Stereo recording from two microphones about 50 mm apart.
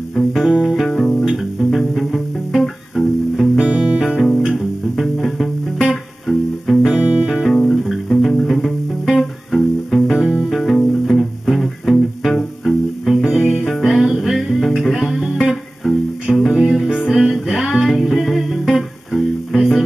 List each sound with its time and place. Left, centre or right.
0.2 s music: centre
0.5 s music: centre
0.7 s music: centre
3.5 s music: centre
4.0 s music: centre
7.0 s music: right
7.4 s music: centre